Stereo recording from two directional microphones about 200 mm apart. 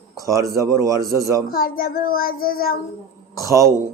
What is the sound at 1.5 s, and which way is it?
Child singing, 45° left (ahead or behind).